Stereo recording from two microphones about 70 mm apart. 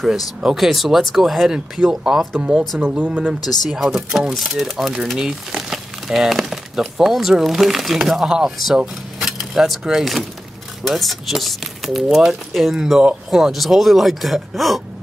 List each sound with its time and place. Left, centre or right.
0.0 s speech: centre
2.9 s speech: centre
3.6 s speech: centre